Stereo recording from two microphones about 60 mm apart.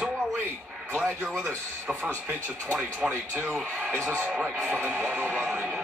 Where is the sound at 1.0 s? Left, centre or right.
Right.